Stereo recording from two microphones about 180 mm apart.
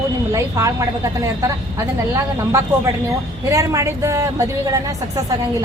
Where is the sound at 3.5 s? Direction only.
15° right (ahead or behind).